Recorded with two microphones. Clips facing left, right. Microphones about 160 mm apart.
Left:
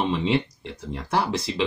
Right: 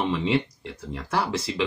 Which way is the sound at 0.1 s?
20° left (ahead or behind).